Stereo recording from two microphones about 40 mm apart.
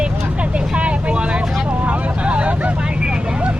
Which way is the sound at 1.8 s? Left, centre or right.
Right.